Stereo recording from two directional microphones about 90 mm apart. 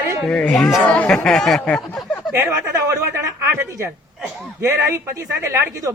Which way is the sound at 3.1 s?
30° right (ahead or behind).